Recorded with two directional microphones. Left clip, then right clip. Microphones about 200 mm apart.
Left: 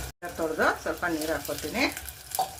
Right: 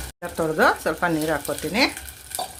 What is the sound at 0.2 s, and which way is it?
Speech, 55° right (ahead or behind).